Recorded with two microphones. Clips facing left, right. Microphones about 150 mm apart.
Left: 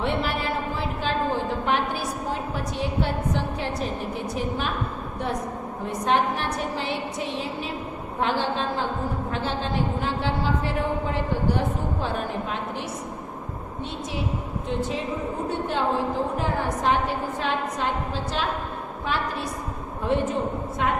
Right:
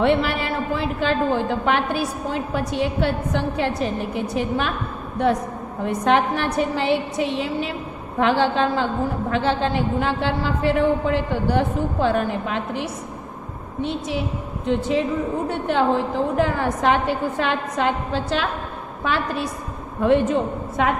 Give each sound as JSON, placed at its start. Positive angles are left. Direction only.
{"t": 0.0, "sound": "a woman's voice", "side_deg": -75}
{"t": 5.8, "sound": "a woman's voice", "side_deg": -70}
{"t": 14.7, "sound": "a woman's voice", "side_deg": -75}
{"t": 20.8, "sound": "a woman's voice", "side_deg": -90}